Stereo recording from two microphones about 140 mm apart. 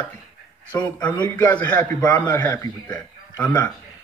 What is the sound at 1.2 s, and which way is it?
A man's voice, 10° left (ahead or behind).